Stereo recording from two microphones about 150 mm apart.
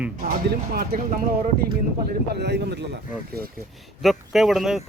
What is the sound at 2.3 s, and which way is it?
Speech, 90° right.